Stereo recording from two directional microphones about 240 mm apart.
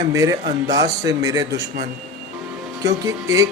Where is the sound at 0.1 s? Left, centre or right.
Centre.